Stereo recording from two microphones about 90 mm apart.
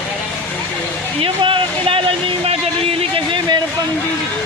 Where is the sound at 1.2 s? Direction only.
75° right (ahead or behind).